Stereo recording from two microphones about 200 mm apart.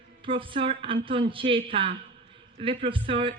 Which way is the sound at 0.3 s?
25° right (ahead or behind).